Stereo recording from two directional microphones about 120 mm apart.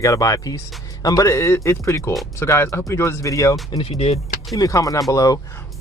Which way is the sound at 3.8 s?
55° left (ahead or behind).